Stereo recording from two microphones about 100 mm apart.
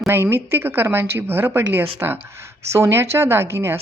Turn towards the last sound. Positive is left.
turn(degrees=-25)  # may be behind; listen again after turning